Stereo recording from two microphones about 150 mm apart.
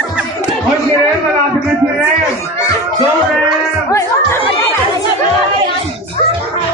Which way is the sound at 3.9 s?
20° left (ahead or behind).